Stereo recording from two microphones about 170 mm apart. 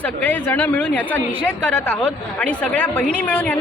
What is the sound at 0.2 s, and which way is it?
A woman's voice, 10° left (ahead or behind).